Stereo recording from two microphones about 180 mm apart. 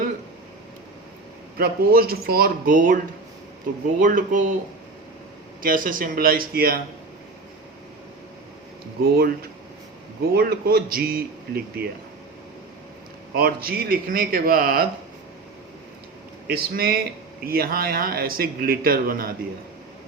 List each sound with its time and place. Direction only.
1.5 s speech: 55° right (ahead or behind)
4.0 s speech: 45° right (ahead or behind)
5.6 s speech: 50° right (ahead or behind)
9.0 s speech: 55° right (ahead or behind)
10.3 s speech: 55° right (ahead or behind)
13.3 s speech: 55° right (ahead or behind)
16.5 s speech: 55° right (ahead or behind)